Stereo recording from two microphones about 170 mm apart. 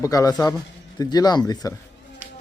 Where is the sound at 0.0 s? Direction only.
20° left (ahead or behind).